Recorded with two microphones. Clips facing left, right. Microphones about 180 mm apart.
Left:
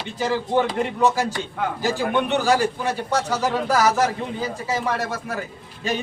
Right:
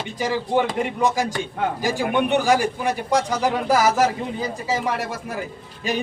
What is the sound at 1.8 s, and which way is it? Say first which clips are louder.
Speech: even; 15° right (ahead or behind).